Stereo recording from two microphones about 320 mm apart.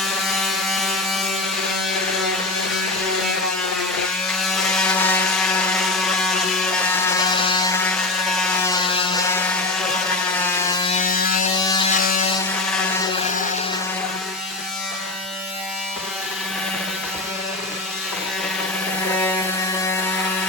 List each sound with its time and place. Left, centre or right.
0.0 s electric shaver: centre
4.4 s mechanisms: centre
6.0 s a sound: centre
7.5 s mechanisms: centre
8.3 s ratchet: centre
10.4 s wood: centre
11.5 s electric shaver: centre
11.9 s electric shaver: left
19.1 s a sound: centre